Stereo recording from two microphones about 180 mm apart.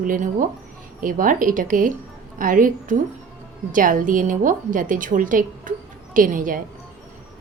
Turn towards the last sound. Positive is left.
turn(degrees=-50)  # may be behind; listen again after turning